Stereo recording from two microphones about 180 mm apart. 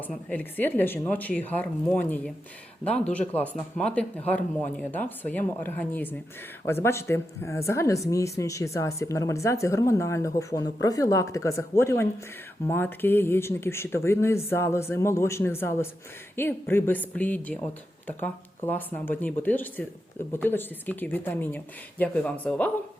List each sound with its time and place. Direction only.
0.3 s speech: 10° left (ahead or behind)